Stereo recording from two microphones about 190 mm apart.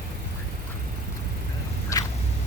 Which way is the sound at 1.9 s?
15° left (ahead or behind).